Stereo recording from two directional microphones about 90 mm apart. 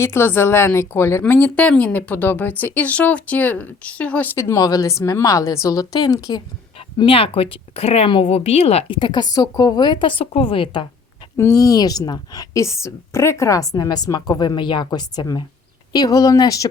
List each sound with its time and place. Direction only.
0.0 s speech: 25° left (ahead or behind)
1.2 s speech: 15° left (ahead or behind)
4.4 s a woman's voice: 35° left (ahead or behind)
7.0 s speech: 90° left
11.3 s a woman's voice: 35° left (ahead or behind)
12.5 s a woman's voice: 30° left (ahead or behind)